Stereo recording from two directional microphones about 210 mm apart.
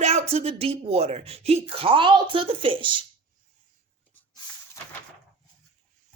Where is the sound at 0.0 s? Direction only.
30° right (ahead or behind).